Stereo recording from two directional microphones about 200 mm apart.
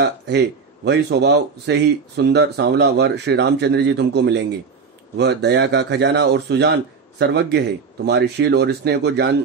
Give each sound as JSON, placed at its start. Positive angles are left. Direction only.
{"t": 0.0, "sound": "speech", "side_deg": -55}